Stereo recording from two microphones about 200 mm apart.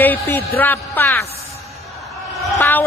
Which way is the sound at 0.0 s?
10° left (ahead or behind).